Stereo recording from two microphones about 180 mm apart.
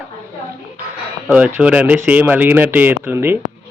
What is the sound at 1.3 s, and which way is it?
Speech, 10° right (ahead or behind).